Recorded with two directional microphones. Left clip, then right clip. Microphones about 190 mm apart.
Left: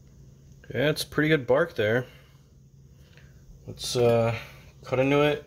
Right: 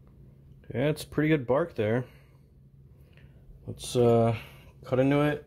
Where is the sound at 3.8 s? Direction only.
35° right (ahead or behind).